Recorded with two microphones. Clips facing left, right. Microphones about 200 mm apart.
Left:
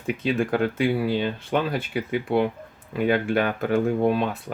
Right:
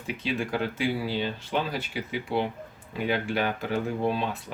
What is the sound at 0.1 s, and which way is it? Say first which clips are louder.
Speech: left 6 dB; 50° left (ahead or behind).